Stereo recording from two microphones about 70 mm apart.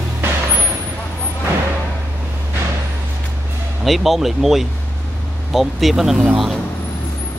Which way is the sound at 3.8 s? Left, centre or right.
Centre.